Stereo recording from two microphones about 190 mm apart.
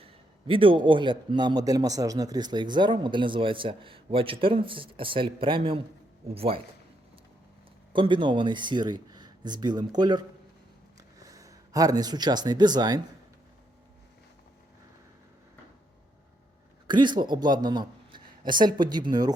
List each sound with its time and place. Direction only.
0.0 s a man's voice: 30° right (ahead or behind)
7.9 s a man's voice: 25° right (ahead or behind)
16.8 s speech: 25° right (ahead or behind)